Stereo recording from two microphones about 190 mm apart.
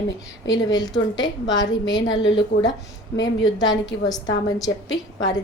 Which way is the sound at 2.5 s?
70° left (ahead or behind).